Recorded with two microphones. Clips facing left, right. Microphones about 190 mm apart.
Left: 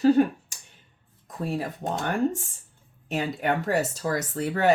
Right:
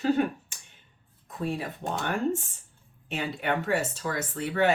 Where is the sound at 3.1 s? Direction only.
40° left (ahead or behind).